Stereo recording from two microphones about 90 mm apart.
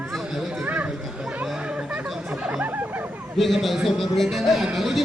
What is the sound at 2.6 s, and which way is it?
Speech, 20° right (ahead or behind).